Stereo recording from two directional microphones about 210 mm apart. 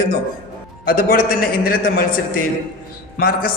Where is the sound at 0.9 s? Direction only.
45° left (ahead or behind).